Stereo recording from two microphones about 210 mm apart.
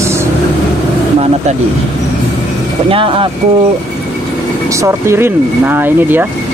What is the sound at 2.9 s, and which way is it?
Speech, 25° right (ahead or behind).